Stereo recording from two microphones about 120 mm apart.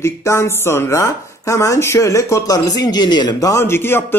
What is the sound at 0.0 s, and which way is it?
Speech, 20° left (ahead or behind).